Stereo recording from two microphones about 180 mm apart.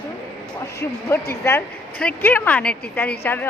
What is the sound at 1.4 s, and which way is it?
A woman's voice, 10° left (ahead or behind).